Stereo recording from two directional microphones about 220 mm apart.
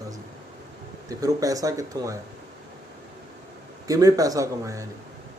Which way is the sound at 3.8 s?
15° right (ahead or behind).